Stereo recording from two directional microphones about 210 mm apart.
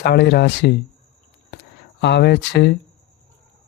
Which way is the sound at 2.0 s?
50° left (ahead or behind).